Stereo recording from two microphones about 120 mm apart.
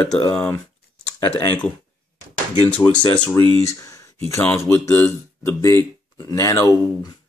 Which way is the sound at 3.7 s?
25° left (ahead or behind).